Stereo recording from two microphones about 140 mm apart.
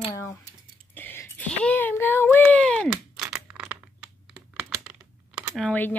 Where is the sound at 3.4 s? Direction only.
10° right (ahead or behind).